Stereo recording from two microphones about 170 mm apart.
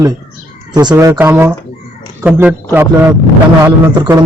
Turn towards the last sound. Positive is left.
turn(degrees=-15)  # may be behind; listen again after turning